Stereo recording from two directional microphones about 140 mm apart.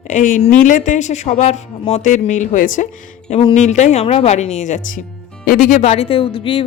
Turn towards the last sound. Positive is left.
turn(degrees=40)  # may be behind; listen again after turning